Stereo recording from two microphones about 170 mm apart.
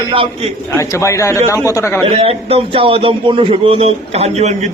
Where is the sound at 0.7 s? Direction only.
15° left (ahead or behind).